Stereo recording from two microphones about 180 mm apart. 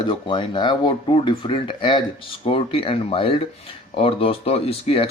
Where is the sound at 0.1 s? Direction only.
25° left (ahead or behind).